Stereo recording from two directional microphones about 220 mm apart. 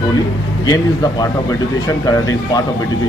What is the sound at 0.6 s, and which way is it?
Speech, 15° left (ahead or behind).